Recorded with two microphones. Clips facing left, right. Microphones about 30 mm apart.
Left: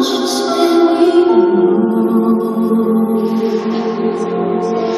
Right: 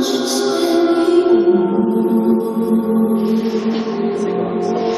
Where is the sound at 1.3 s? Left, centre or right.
Centre.